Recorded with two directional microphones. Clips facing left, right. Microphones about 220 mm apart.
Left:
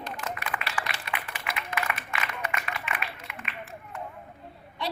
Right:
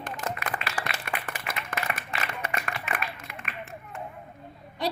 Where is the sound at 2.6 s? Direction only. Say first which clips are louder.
Right 2 dB; 45° right (ahead or behind).